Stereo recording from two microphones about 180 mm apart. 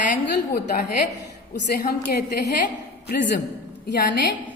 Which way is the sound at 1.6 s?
55° left (ahead or behind).